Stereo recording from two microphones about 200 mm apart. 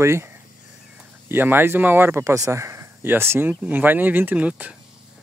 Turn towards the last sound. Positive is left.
turn(degrees=-5)  # may be behind; listen again after turning